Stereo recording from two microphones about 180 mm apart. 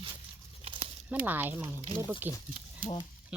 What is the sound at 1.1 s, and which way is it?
Speech, 10° right (ahead or behind).